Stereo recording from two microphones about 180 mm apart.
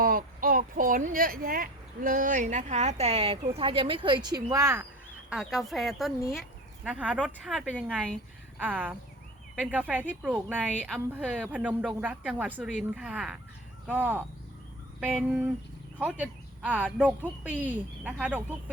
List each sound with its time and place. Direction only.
0.0 s speech: 50° right (ahead or behind); by 4.9 s 15° right (ahead or behind)
5.3 s speech: centre (ahead or behind)
10.7 s speech: 5° left (ahead or behind); by 14.3 s 10° right (ahead or behind)
16.0 s speech: 10° right (ahead or behind)